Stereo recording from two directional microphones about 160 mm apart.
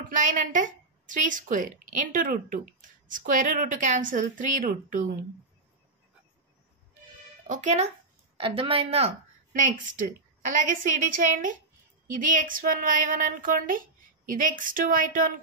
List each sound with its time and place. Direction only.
0.1 s speech: 55° right (ahead or behind)
7.4 s speech: 50° right (ahead or behind)
8.4 s a woman's voice: 35° right (ahead or behind)
9.5 s speech: 55° right (ahead or behind)